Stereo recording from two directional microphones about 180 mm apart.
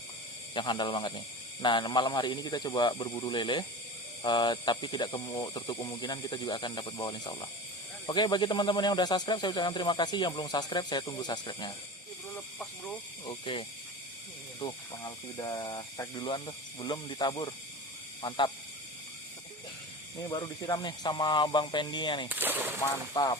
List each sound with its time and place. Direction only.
0.5 s speech: 25° left (ahead or behind)
12.3 s speech: 5° left (ahead or behind)
13.2 s speech: 30° left (ahead or behind)
20.1 s speech: 20° left (ahead or behind)
22.3 s speech: 10° right (ahead or behind)
23.1 s speech: 25° left (ahead or behind)